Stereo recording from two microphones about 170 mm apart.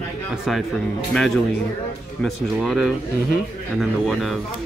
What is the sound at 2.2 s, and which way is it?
Speech, centre (ahead or behind).